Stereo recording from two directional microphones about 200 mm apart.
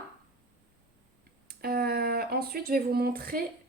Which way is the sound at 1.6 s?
50° right (ahead or behind).